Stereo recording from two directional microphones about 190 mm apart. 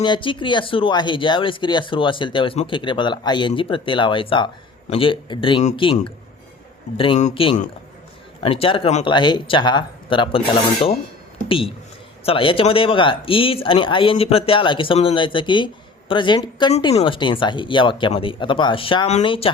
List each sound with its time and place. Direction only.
0.0 s speech: 25° left (ahead or behind)